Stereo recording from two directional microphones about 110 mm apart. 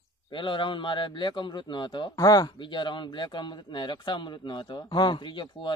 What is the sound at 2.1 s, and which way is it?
Speech, 30° left (ahead or behind).